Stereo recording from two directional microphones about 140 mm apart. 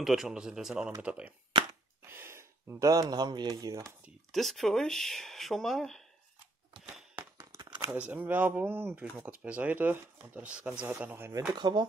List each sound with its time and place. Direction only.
0.0 s speech: 5° right (ahead or behind); by 3.9 s 25° right (ahead or behind)
4.3 s speech: centre (ahead or behind)
7.2 s a sound: 20° right (ahead or behind)
8.0 s speech: 10° right (ahead or behind)
11.5 s speech: 30° right (ahead or behind)